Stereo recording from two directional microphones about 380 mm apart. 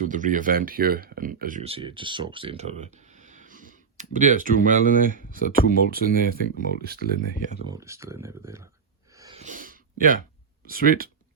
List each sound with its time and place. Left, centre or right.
0.0 s speech: centre
7.7 s speech: centre
9.1 s a sound: centre
10.7 s speech: right